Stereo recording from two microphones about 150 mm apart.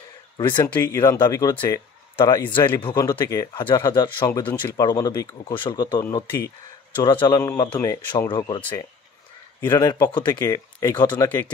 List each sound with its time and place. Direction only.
0.4 s speech: 30° left (ahead or behind)
4.3 s speech: 15° left (ahead or behind)
4.8 s speech: 25° left (ahead or behind)
9.7 s speech: 20° left (ahead or behind)